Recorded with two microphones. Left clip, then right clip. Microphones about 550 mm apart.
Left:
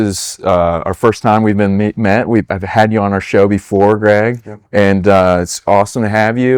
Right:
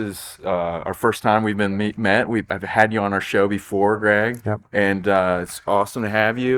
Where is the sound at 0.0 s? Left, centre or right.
Left.